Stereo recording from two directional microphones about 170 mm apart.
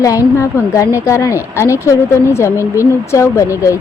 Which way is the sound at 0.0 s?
20° left (ahead or behind).